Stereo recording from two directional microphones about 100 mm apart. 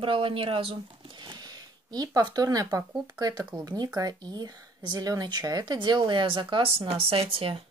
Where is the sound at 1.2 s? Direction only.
45° right (ahead or behind).